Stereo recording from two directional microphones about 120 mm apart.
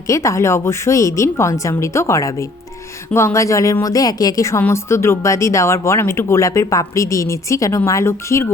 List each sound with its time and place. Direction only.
0.1 s speech: 25° left (ahead or behind)